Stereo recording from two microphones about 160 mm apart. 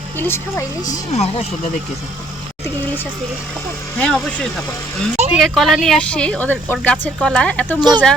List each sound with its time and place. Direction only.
0.2 s speech: 15° left (ahead or behind)
1.1 s speech: 40° left (ahead or behind)
3.9 s speech: 10° left (ahead or behind)
7.8 s speech: 25° right (ahead or behind)